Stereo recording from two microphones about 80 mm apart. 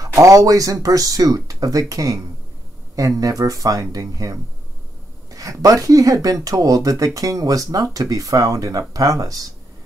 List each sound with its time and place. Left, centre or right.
0.0 s speech: right